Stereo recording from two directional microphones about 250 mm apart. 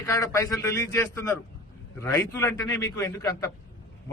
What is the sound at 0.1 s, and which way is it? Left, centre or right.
A man's voice, centre.